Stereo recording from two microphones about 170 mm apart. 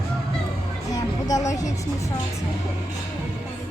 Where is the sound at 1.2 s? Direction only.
20° left (ahead or behind).